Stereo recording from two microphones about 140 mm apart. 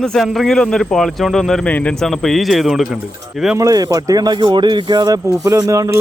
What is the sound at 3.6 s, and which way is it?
Speech, 25° right (ahead or behind).